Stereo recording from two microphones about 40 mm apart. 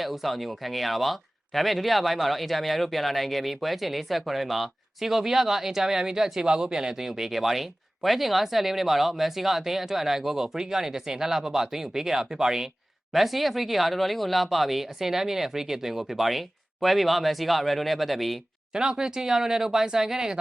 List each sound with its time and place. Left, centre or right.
0.0 s speech: centre
13.1 s speech: centre
18.7 s speech: centre